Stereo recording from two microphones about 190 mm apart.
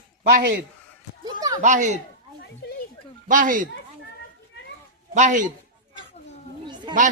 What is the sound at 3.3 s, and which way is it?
Speech, 45° right (ahead or behind).